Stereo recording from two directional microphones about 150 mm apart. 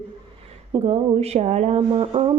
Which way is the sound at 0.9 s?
45° right (ahead or behind).